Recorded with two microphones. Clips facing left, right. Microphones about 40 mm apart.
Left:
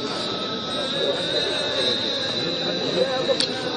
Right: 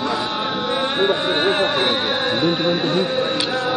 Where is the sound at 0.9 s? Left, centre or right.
Right.